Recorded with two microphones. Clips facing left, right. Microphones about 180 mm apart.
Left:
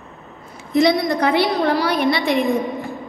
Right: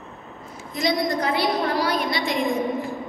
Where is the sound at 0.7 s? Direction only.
65° left (ahead or behind).